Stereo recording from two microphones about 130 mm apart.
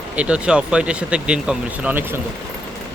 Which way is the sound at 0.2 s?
10° right (ahead or behind).